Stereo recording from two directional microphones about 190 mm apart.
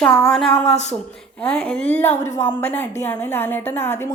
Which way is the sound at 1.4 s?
10° left (ahead or behind).